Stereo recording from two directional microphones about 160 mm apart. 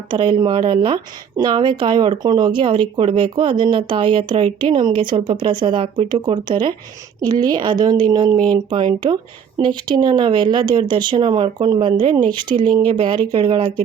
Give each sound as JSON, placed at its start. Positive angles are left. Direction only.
{"t": 0.1, "sound": "speech", "side_deg": -30}